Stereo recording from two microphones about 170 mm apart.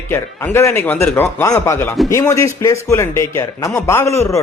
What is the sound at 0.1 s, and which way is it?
Speech, 15° left (ahead or behind).